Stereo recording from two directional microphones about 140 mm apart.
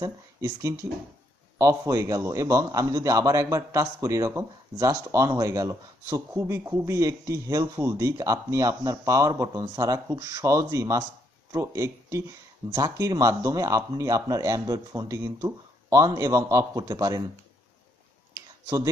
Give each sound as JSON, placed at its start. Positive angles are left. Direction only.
{"t": 0.0, "sound": "a man's voice", "side_deg": -25}